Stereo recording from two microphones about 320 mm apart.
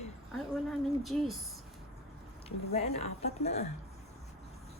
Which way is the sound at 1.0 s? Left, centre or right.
Centre.